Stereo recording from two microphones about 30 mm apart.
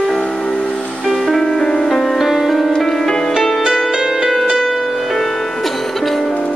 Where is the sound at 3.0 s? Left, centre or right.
Left.